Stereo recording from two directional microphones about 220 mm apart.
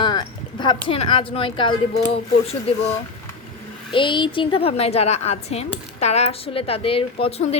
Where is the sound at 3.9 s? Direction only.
20° left (ahead or behind).